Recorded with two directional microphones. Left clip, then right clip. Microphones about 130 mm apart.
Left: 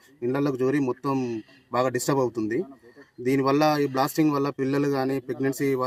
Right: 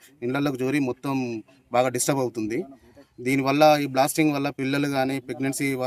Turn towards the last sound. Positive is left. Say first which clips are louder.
# left 1 dB
turn(degrees=-20)  # may be behind; listen again after turning